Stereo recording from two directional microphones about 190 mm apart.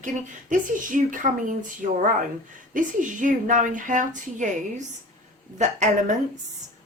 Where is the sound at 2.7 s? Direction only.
45° right (ahead or behind).